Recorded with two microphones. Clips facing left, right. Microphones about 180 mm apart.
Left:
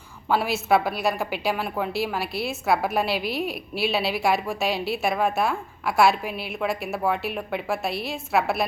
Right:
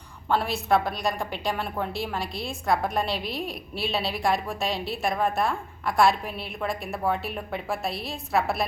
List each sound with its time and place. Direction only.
0.3 s a woman's voice: 5° left (ahead or behind)